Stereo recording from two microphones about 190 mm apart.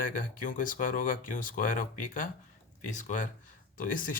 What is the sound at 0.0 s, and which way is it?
Speech, 45° left (ahead or behind).